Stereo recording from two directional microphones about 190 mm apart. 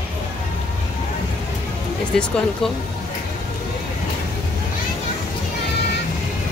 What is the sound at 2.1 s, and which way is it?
Speech, 5° left (ahead or behind).